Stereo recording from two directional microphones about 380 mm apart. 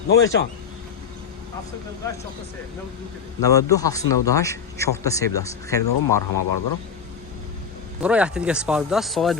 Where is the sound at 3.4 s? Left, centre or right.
Centre.